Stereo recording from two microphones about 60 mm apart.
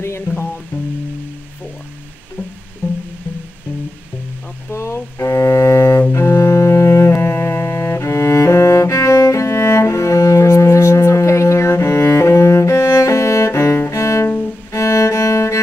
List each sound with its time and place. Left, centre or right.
0.3 s music: left
4.7 s music: left
6.1 s double bass: left
7.1 s music: left